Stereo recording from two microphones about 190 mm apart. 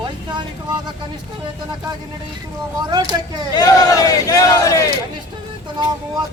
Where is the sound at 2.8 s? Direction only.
20° right (ahead or behind).